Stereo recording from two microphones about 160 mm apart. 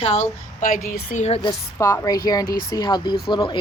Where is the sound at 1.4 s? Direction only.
15° left (ahead or behind).